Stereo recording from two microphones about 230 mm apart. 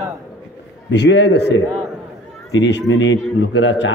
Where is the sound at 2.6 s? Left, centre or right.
Left.